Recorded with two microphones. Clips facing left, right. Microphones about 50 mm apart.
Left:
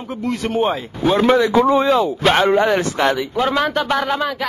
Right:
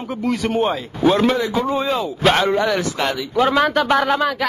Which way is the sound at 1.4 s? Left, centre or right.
Left.